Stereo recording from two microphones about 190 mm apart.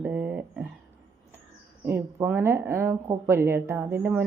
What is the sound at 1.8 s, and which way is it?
A woman's voice, 10° right (ahead or behind).